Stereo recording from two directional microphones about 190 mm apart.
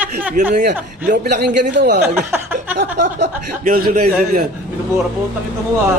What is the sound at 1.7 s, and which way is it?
Speech, 60° right (ahead or behind).